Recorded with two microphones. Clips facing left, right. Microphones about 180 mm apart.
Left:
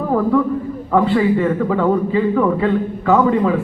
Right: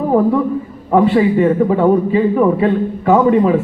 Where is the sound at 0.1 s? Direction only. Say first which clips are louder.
Right 2 dB; 20° right (ahead or behind).